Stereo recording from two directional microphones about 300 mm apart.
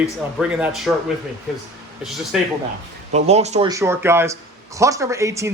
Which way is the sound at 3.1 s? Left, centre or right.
Right.